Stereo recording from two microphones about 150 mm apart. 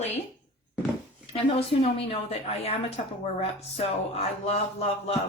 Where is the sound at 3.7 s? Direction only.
45° left (ahead or behind).